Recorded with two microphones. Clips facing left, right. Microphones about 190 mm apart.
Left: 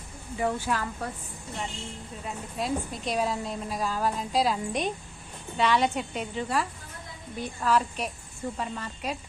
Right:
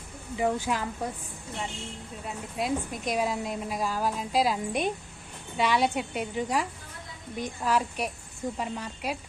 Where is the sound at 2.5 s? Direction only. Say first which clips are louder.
Right 1 dB; 10° right (ahead or behind).